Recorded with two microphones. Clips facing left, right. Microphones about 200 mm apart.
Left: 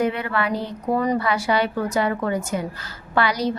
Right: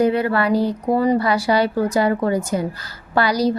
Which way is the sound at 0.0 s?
35° right (ahead or behind).